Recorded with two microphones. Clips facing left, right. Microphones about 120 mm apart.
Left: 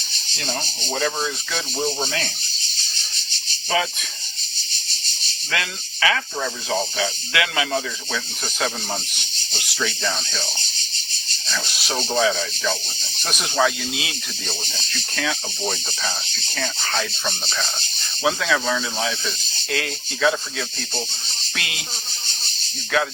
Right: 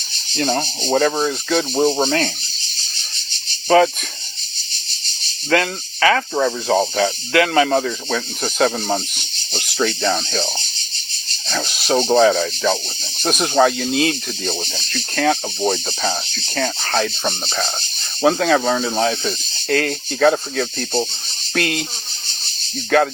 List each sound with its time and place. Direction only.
0.3 s speech: 50° right (ahead or behind)
3.7 s speech: 50° right (ahead or behind)
5.5 s speech: 45° right (ahead or behind)
11.4 s speech: 55° right (ahead or behind)
22.9 s speech: 50° right (ahead or behind)